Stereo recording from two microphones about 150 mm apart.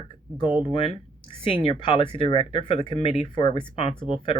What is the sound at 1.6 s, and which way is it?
Speech, 35° left (ahead or behind).